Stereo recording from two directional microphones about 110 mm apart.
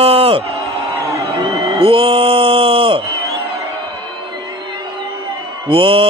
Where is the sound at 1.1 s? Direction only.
25° right (ahead or behind).